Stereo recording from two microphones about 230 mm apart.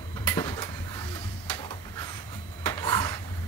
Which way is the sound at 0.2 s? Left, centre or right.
Centre.